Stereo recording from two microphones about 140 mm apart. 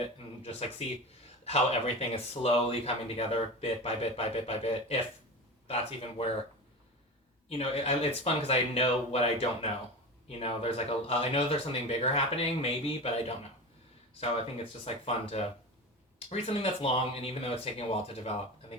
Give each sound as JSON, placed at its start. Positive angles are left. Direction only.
{"t": 1.5, "sound": "speech", "side_deg": 45}
{"t": 7.6, "sound": "speech", "side_deg": 45}